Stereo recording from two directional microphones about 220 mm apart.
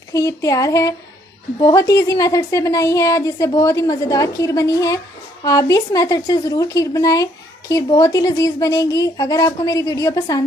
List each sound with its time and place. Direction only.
0.1 s a woman's voice: 15° left (ahead or behind)